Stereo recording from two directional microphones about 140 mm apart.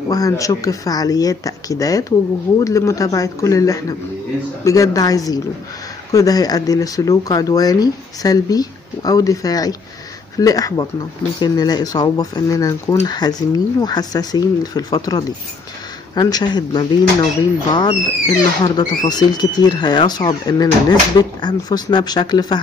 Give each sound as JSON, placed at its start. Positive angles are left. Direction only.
{"t": 0.1, "sound": "speech", "side_deg": 25}